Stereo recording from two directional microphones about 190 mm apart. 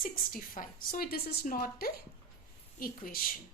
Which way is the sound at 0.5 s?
50° left (ahead or behind).